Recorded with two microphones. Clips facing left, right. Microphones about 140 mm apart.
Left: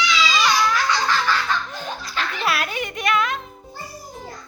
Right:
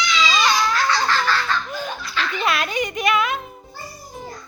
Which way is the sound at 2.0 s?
45° left (ahead or behind).